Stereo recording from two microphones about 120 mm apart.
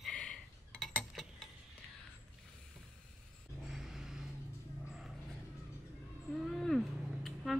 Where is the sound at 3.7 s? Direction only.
5° right (ahead or behind).